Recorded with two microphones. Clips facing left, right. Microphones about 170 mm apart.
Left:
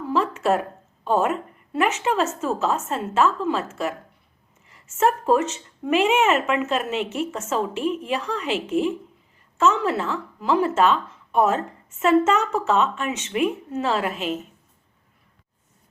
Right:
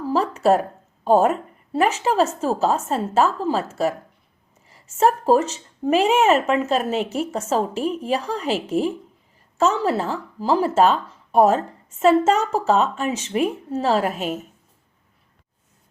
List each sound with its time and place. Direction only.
0.0 s speech: 35° right (ahead or behind)
4.7 s speech: 35° right (ahead or behind)